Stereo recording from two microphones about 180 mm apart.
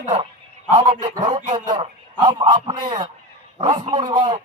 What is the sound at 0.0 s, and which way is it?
A man's voice, 35° right (ahead or behind).